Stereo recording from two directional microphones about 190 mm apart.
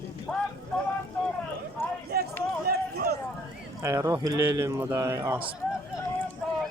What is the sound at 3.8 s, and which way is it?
Speech, 15° right (ahead or behind).